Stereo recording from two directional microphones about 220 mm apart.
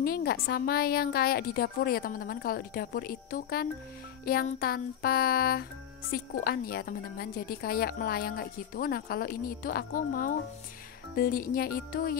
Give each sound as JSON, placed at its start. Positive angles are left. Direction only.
{"t": 0.0, "sound": "a woman's voice", "side_deg": 45}
{"t": 11.1, "sound": "music", "side_deg": 40}